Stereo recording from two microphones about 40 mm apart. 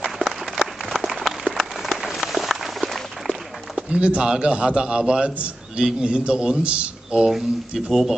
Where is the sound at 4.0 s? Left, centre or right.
Right.